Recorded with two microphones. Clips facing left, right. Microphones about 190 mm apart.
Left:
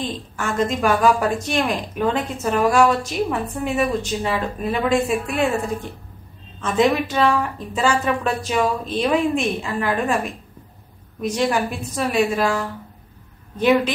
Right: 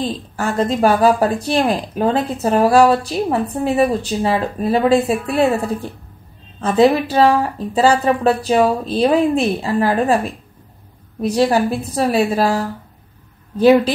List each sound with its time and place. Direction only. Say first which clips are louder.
0.0 s a woman's voice: right 5 dB; 30° right (ahead or behind)